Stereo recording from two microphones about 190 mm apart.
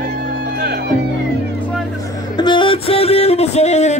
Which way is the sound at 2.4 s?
25° left (ahead or behind).